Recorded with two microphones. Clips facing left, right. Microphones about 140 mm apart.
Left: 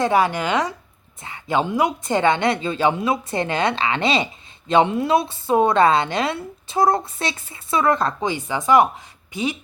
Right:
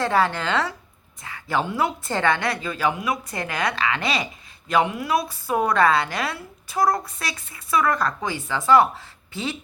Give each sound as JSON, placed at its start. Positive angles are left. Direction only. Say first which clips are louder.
{"t": 0.0, "sound": "a woman's voice", "louder": "left 3 dB", "side_deg": 15}